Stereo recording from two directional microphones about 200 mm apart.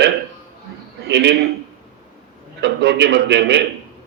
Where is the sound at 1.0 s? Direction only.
55° right (ahead or behind).